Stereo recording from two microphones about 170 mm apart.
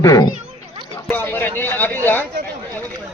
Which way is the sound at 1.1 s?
10° left (ahead or behind).